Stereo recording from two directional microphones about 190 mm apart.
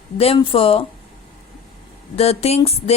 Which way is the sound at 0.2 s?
30° left (ahead or behind).